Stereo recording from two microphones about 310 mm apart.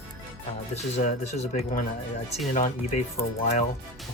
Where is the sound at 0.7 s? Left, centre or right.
Left.